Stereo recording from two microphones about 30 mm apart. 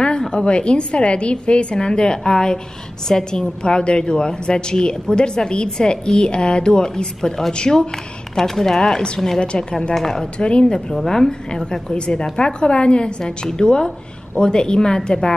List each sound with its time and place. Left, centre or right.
0.3 s a woman's voice: left; by 9.0 s centre
9.4 s a woman's voice: left
9.9 s speech: centre
10.4 s a woman's voice: left
11.9 s a woman's voice: left
13.2 s a woman's voice: left